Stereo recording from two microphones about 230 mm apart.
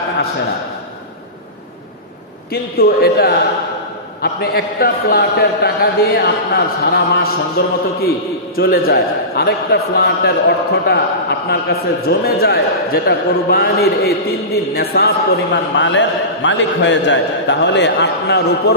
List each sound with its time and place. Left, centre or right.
2.5 s a man's voice: left